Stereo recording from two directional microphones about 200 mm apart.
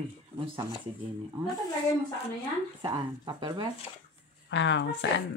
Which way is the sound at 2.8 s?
25° right (ahead or behind).